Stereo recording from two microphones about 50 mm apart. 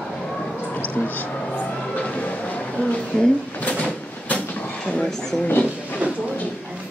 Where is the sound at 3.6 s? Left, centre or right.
Left.